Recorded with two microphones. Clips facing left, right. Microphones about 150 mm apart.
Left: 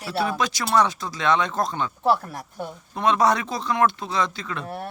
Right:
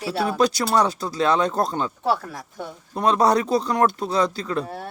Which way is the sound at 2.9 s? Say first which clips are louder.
Right 2 dB; 35° right (ahead or behind).